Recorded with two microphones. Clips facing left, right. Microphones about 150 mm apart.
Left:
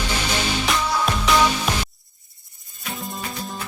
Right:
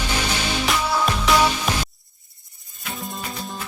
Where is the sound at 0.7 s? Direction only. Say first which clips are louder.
Right 2 dB; centre (ahead or behind).